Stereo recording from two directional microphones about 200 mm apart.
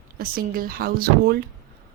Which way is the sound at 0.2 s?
45° right (ahead or behind).